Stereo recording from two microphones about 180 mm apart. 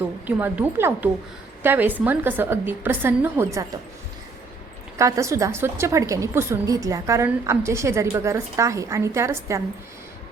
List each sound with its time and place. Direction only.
0.3 s a woman's voice: 10° right (ahead or behind)
4.9 s a woman's voice: 15° right (ahead or behind)